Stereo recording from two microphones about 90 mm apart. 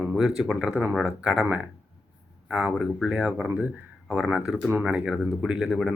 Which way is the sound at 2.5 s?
10° right (ahead or behind).